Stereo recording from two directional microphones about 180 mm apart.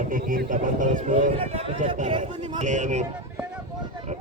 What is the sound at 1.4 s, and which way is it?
Speech, 30° right (ahead or behind).